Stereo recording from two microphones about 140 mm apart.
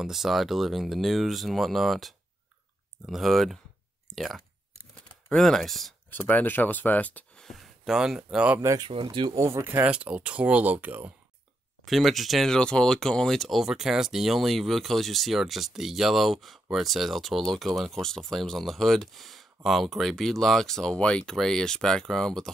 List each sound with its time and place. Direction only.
0.0 s speech: centre (ahead or behind)
6.1 s speech: 15° left (ahead or behind); by 8.5 s 5° right (ahead or behind)
8.5 s speech: 20° right (ahead or behind)
8.8 s speech: 40° right (ahead or behind)
9.3 s speech: 20° right (ahead or behind)
11.8 s speech: centre (ahead or behind)